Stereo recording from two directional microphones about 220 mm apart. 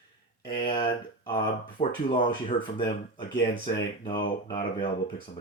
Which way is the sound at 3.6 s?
20° left (ahead or behind).